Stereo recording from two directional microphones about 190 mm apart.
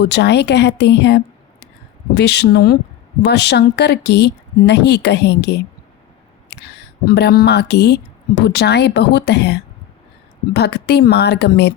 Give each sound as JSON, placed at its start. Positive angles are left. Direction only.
{"t": 0.0, "sound": "speech", "side_deg": 65}